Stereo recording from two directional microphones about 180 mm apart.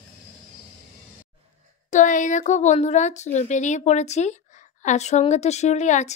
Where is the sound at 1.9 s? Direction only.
45° left (ahead or behind).